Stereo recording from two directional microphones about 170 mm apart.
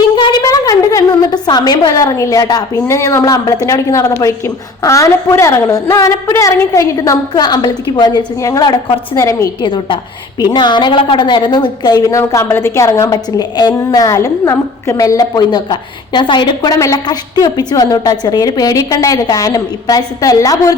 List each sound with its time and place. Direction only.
0.2 s a woman's voice: 20° left (ahead or behind)
9.6 s a woman's voice: 30° left (ahead or behind)